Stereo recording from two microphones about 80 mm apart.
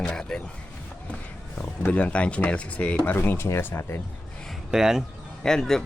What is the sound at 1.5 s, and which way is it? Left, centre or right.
Speech, centre.